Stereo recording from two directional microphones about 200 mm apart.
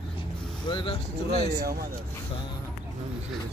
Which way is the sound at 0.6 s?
25° left (ahead or behind).